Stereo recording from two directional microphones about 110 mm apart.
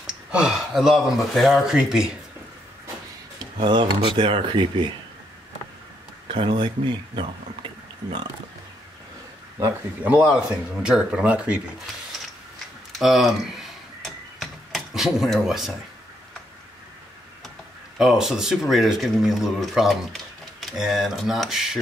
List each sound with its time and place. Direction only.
0.3 s speech: 5° right (ahead or behind)
3.6 s speech: 45° right (ahead or behind)
6.2 s speech: 50° right (ahead or behind)
10.0 s speech: 15° right (ahead or behind)
13.0 s a sound: centre (ahead or behind)
17.9 s speech: 5° right (ahead or behind)